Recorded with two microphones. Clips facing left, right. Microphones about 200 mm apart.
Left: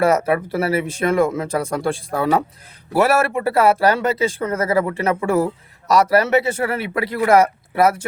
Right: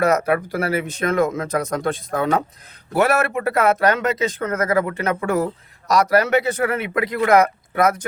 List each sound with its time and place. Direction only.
0.0 s speech: 30° left (ahead or behind)